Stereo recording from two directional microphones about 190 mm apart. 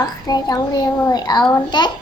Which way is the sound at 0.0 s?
20° left (ahead or behind).